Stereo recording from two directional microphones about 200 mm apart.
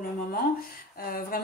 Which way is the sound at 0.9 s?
45° left (ahead or behind).